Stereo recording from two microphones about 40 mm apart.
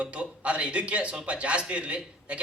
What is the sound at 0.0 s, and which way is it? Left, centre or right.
A man's voice, right.